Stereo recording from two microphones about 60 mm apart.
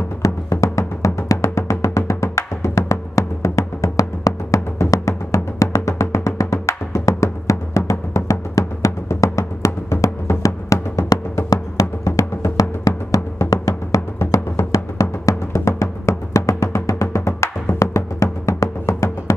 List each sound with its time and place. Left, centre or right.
0.2 s music: left